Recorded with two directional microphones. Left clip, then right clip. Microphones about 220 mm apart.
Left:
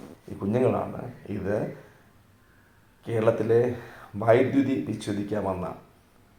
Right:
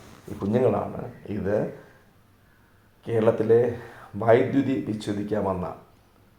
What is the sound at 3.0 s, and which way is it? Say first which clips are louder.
Speech: right 2 dB; 20° right (ahead or behind).